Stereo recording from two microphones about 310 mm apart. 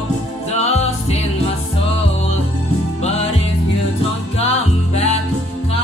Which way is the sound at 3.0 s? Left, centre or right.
Centre.